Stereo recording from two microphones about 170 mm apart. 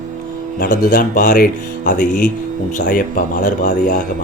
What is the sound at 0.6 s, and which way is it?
Speech, 50° left (ahead or behind).